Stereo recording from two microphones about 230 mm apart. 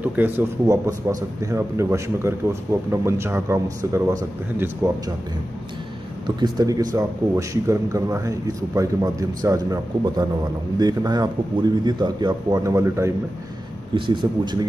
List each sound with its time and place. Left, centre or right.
0.0 s a man's voice: centre
6.2 s a man's voice: centre